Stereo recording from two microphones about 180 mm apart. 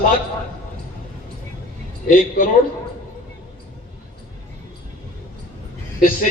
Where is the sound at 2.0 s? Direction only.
50° left (ahead or behind).